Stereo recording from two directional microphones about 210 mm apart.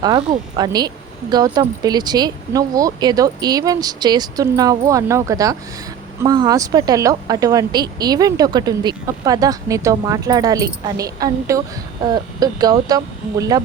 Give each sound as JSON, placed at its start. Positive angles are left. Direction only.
{"t": 0.0, "sound": "speech", "side_deg": -20}